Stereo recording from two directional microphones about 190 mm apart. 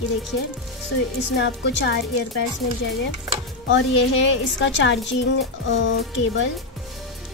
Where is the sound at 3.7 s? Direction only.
75° left (ahead or behind).